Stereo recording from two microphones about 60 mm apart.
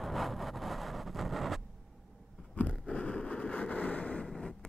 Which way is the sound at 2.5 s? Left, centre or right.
Left.